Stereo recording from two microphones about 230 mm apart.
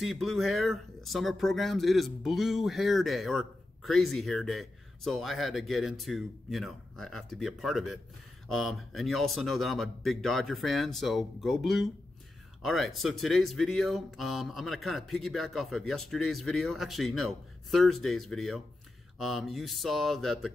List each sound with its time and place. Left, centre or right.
0.0 s speech: centre